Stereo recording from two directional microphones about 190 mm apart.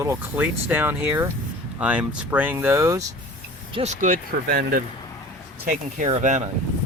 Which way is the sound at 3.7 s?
30° right (ahead or behind).